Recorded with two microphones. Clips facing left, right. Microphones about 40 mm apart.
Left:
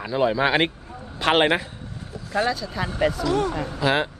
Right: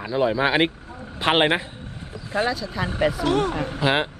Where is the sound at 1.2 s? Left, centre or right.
Centre.